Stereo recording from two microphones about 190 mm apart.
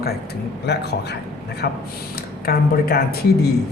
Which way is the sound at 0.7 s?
60° left (ahead or behind).